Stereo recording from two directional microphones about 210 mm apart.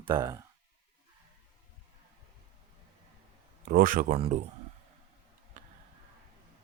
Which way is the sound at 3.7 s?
40° right (ahead or behind).